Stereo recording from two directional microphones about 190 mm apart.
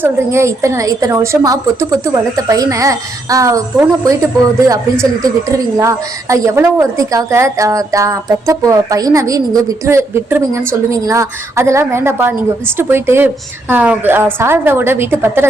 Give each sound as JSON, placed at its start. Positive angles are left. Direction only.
{"t": 0.0, "sound": "a woman's voice", "side_deg": -15}